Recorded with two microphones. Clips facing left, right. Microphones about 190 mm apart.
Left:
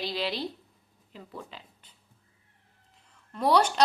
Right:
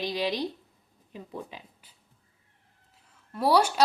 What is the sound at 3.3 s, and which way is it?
Speech, 5° right (ahead or behind).